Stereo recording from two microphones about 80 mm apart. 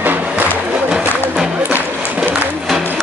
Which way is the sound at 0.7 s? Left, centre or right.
Centre.